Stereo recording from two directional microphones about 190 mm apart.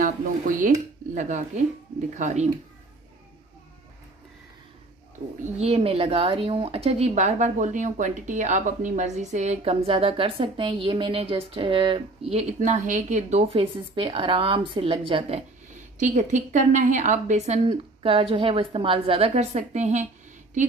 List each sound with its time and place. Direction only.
0.0 s speech: 45° right (ahead or behind)
5.4 s speech: 30° right (ahead or behind)
12.3 s speech: 35° right (ahead or behind)